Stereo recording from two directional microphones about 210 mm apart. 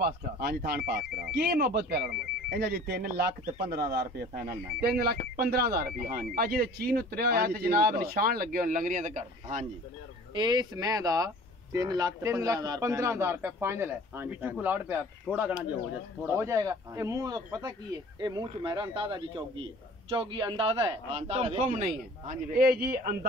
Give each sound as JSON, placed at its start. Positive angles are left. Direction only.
{"t": 0.0, "sound": "speech", "side_deg": -50}
{"t": 10.3, "sound": "a man's voice", "side_deg": -20}